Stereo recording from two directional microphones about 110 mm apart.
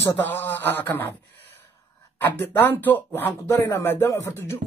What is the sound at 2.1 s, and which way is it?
Speech, 20° left (ahead or behind).